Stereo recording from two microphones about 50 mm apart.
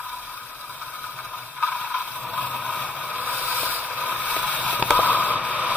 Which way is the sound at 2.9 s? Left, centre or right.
Right.